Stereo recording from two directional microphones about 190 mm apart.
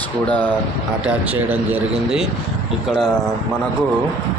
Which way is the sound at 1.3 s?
10° right (ahead or behind).